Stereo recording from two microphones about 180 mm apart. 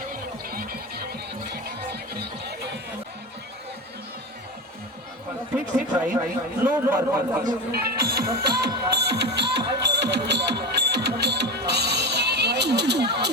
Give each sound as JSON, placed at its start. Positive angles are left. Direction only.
{"t": 0.1, "sound": "a sound", "side_deg": -55}
{"t": 1.5, "sound": "music", "side_deg": -65}
{"t": 5.5, "sound": "a man's voice", "side_deg": -5}
{"t": 7.4, "sound": "music", "side_deg": -60}